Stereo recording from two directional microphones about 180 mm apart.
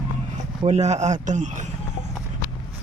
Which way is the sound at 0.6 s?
40° right (ahead or behind).